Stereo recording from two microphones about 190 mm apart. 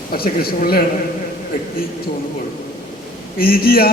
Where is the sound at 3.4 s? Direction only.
50° left (ahead or behind).